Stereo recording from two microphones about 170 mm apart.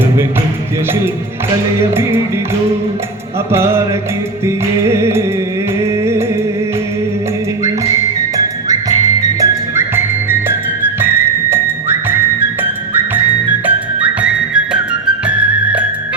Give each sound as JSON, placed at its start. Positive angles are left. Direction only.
{"t": 1.8, "sound": "music", "side_deg": -15}
{"t": 3.5, "sound": "music", "side_deg": -15}
{"t": 9.4, "sound": "music", "side_deg": -15}